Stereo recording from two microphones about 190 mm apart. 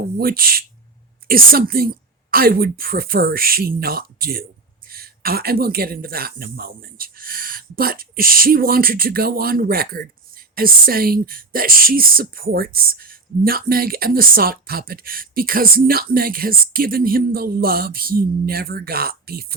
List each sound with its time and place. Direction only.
0.0 s speech: 50° right (ahead or behind)